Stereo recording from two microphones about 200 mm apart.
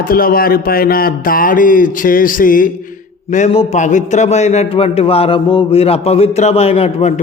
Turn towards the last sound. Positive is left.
turn(degrees=30)  # may be behind; listen again after turning